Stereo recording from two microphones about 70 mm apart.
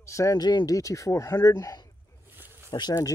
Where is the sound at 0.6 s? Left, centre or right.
Left.